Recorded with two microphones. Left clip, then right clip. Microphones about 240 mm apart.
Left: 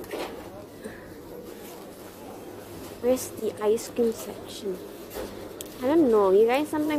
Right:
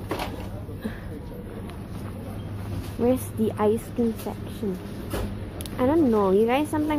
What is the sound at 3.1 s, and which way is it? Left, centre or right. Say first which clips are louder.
Speech: left 1 dB; centre.